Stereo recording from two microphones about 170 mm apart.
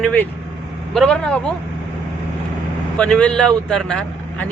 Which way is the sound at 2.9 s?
5° left (ahead or behind).